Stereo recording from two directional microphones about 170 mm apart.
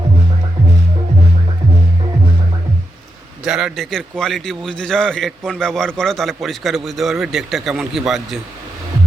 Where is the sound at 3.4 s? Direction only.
5° right (ahead or behind).